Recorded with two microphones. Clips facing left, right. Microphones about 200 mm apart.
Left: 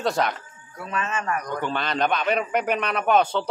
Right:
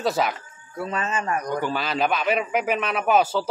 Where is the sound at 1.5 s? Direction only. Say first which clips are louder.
Right 2 dB; 5° right (ahead or behind).